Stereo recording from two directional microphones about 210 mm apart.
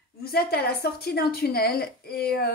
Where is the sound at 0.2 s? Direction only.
50° left (ahead or behind).